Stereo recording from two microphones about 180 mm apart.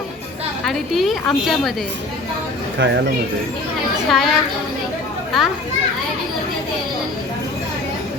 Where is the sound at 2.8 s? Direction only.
85° right.